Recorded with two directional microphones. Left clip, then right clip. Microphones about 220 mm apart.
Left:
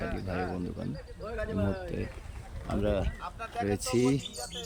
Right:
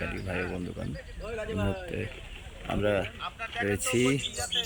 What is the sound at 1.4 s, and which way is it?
Speech, 20° right (ahead or behind).